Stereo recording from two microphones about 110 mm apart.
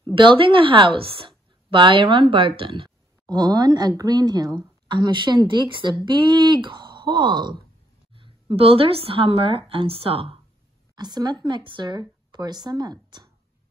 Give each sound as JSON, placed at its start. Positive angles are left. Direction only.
{"t": 0.0, "sound": "speech", "side_deg": -45}
{"t": 8.1, "sound": "speech", "side_deg": -55}
{"t": 11.0, "sound": "speech", "side_deg": -40}